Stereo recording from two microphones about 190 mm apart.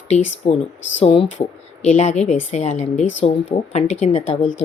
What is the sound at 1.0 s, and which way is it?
Speech, 30° left (ahead or behind).